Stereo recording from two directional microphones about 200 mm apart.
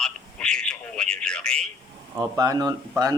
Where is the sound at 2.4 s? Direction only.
20° right (ahead or behind).